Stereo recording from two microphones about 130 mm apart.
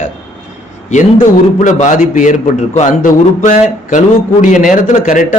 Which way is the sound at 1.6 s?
70° left (ahead or behind).